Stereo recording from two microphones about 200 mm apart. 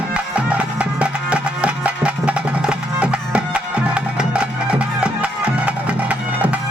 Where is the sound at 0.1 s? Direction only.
5° right (ahead or behind).